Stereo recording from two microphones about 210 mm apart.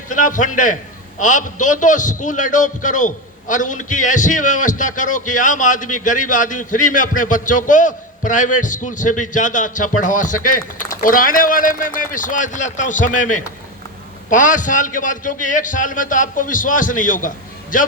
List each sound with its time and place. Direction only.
0.1 s a man's voice: 40° left (ahead or behind)